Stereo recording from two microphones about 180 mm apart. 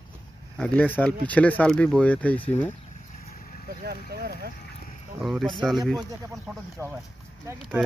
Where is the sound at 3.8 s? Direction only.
60° right (ahead or behind).